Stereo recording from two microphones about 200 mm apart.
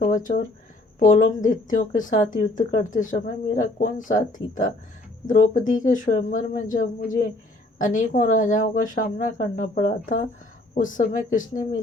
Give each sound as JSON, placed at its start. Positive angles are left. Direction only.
{"t": 0.0, "sound": "speech", "side_deg": 40}